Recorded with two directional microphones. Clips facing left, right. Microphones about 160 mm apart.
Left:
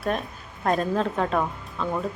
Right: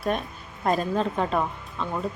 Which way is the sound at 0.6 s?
Centre (ahead or behind).